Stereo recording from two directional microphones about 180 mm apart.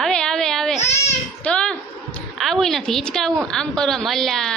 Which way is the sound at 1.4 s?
5° left (ahead or behind).